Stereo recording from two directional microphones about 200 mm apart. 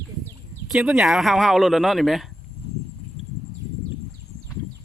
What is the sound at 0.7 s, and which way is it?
Speech, centre (ahead or behind).